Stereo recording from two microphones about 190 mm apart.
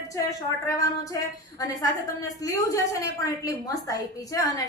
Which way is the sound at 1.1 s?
20° left (ahead or behind).